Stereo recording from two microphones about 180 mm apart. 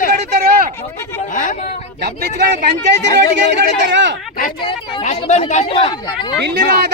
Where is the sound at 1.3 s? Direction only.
45° left (ahead or behind).